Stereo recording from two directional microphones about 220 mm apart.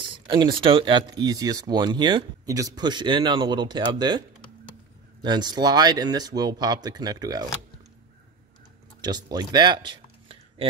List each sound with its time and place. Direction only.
0.1 s a sound: 20° right (ahead or behind)
0.6 s speech: 25° right (ahead or behind)
5.2 s speech: 20° right (ahead or behind)
9.0 s speech: 20° right (ahead or behind)